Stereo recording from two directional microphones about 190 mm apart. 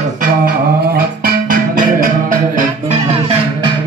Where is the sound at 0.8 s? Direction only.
50° right (ahead or behind).